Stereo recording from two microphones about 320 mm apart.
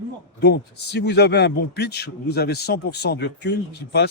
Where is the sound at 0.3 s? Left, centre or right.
Left.